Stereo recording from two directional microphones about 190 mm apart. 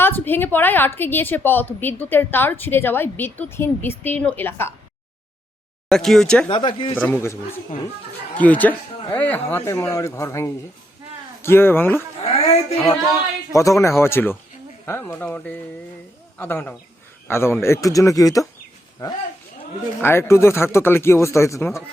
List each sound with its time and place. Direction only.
0.0 s a woman's voice: 10° left (ahead or behind)
5.9 s speech: centre (ahead or behind)
6.5 s speech: 25° left (ahead or behind)
6.9 s a woman's voice: 10° left (ahead or behind)
8.4 s a woman's voice: 10° left (ahead or behind)
12.2 s a woman's voice: 35° left (ahead or behind)
13.5 s a woman's voice: 15° left (ahead or behind)